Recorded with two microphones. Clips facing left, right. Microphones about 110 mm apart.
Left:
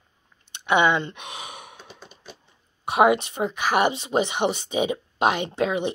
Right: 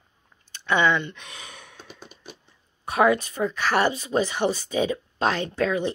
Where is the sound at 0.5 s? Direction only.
20° left (ahead or behind).